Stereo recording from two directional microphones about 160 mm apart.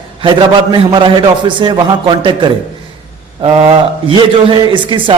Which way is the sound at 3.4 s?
30° right (ahead or behind).